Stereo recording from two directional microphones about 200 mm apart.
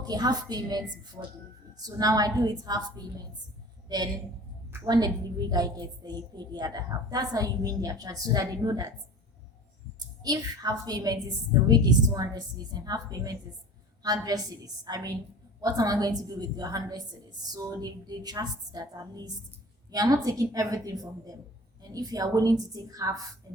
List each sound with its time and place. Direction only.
0.0 s a woman's voice: 20° right (ahead or behind)
10.2 s a woman's voice: 20° right (ahead or behind)